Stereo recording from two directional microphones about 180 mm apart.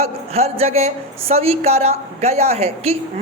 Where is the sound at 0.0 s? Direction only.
35° right (ahead or behind).